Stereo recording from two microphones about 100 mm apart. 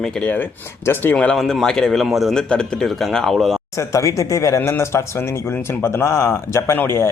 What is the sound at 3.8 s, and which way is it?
Speech, 30° left (ahead or behind).